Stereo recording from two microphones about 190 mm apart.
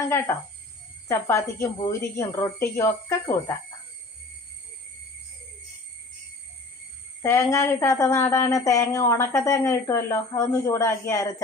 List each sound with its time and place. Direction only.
0.0 s a woman's voice: 15° left (ahead or behind)
7.2 s a woman's voice: 15° left (ahead or behind)